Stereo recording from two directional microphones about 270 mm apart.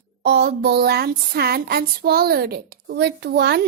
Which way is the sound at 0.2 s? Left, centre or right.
Right.